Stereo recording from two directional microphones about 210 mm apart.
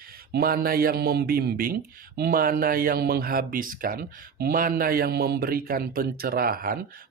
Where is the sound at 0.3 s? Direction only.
45° right (ahead or behind).